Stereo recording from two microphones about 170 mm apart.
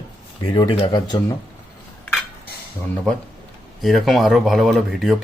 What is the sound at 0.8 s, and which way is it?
Speech, 25° left (ahead or behind).